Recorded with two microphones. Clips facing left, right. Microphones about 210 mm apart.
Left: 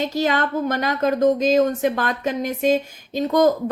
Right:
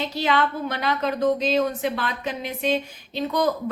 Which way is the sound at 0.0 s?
45° left (ahead or behind).